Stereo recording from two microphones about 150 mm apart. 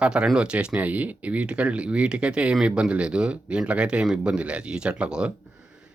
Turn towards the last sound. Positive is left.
turn(degrees=-5)  # may be behind; listen again after turning